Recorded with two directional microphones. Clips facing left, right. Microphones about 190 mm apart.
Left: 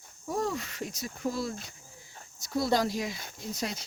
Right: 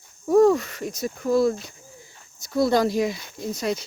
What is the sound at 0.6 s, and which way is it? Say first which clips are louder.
Speech: right 8 dB; 50° right (ahead or behind).